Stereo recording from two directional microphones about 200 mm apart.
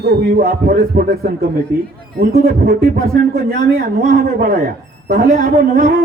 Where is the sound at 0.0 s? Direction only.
55° right (ahead or behind).